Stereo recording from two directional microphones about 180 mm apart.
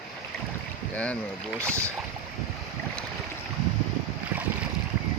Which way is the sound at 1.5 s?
15° right (ahead or behind).